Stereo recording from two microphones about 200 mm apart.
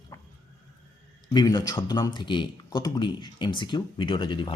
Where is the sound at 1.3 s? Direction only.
20° left (ahead or behind).